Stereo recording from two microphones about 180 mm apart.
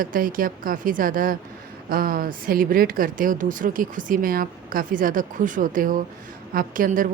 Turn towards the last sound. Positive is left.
turn(degrees=-50)  # may be behind; listen again after turning